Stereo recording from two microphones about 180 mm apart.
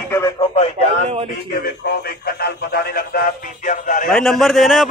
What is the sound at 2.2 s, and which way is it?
Speech, 55° left (ahead or behind).